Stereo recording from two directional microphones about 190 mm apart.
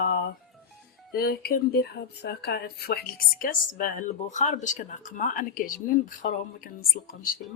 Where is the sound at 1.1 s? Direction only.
55° left (ahead or behind).